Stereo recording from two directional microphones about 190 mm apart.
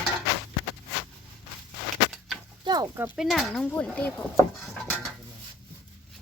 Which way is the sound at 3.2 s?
Centre (ahead or behind).